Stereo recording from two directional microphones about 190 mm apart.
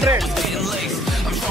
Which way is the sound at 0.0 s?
Centre (ahead or behind).